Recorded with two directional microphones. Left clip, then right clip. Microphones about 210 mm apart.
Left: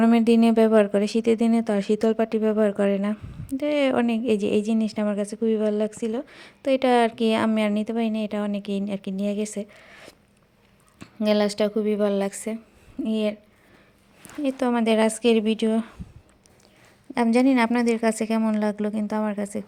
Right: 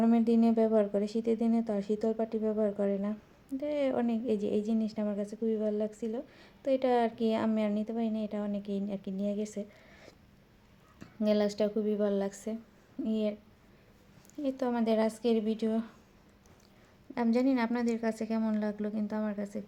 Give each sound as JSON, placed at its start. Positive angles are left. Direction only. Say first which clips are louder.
{"t": 0.0, "sound": "speech", "louder": "left 8 dB", "side_deg": 25}
{"t": 14.4, "sound": "speech", "louder": "left 8 dB", "side_deg": 25}
{"t": 17.2, "sound": "speech", "louder": "left 9 dB", "side_deg": 25}